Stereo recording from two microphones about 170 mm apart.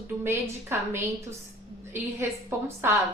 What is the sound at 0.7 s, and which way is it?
Speech, 15° right (ahead or behind).